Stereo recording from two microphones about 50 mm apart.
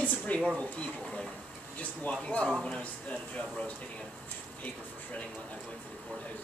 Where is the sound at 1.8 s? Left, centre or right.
Left.